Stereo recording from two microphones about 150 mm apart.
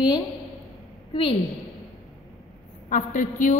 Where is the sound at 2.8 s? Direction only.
60° left (ahead or behind).